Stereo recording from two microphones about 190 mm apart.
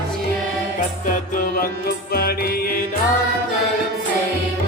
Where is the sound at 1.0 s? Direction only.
45° left (ahead or behind).